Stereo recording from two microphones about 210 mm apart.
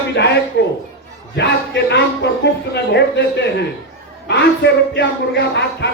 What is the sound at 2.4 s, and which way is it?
A man's voice, 55° left (ahead or behind).